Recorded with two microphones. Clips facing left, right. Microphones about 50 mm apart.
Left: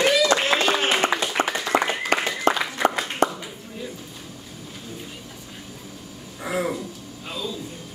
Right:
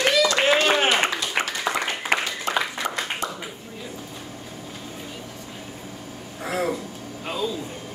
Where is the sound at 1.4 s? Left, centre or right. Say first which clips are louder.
Left 1 dB; right.